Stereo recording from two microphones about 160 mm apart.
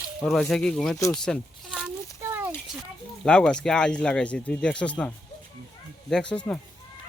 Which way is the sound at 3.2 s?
5° left (ahead or behind).